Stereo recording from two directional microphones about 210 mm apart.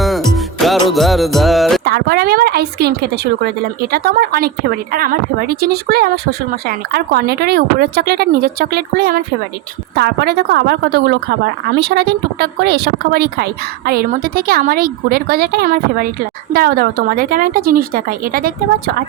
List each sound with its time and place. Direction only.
0.0 s music: centre (ahead or behind)
1.8 s speech: 50° right (ahead or behind)
3.9 s speech: 45° right (ahead or behind)